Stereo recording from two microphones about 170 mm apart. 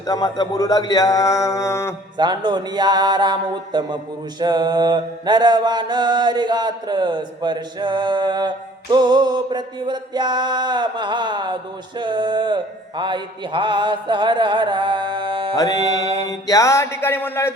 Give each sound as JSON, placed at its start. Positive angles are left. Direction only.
{"t": 0.0, "sound": "speech", "side_deg": 20}
{"t": 2.1, "sound": "mantra", "side_deg": -25}
{"t": 15.5, "sound": "speech", "side_deg": 20}
{"t": 16.2, "sound": "a sound", "side_deg": 20}